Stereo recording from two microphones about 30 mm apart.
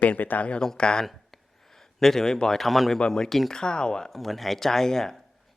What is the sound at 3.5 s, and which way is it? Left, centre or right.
Speech, left.